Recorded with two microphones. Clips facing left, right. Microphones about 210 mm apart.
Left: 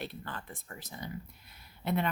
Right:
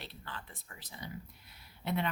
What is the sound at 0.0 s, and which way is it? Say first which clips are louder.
A woman's voice: left 6 dB; 50° left (ahead or behind).